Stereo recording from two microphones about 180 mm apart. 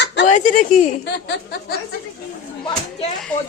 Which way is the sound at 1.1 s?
70° left (ahead or behind).